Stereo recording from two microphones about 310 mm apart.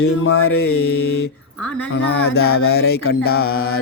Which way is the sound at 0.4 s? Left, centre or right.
Left.